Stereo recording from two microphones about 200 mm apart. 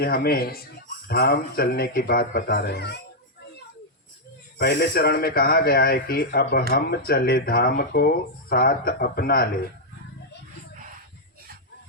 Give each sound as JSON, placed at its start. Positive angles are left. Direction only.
{"t": 0.0, "sound": "speech", "side_deg": 50}
{"t": 4.5, "sound": "speech", "side_deg": 50}